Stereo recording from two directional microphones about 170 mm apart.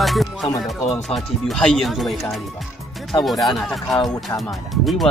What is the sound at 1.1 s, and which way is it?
Speech, centre (ahead or behind).